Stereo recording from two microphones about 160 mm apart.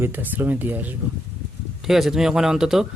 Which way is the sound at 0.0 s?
10° right (ahead or behind).